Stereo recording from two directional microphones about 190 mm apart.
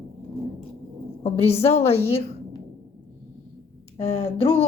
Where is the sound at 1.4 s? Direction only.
35° left (ahead or behind).